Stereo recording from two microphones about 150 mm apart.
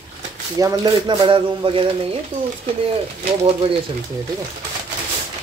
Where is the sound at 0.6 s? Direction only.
30° right (ahead or behind).